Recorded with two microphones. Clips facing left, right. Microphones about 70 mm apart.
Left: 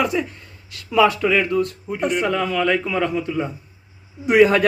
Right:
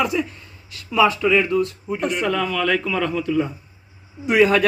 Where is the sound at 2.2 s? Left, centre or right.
Left.